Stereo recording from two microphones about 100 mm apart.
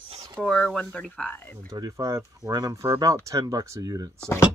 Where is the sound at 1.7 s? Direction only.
35° right (ahead or behind).